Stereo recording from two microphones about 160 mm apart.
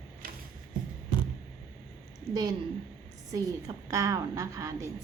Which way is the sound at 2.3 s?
25° right (ahead or behind).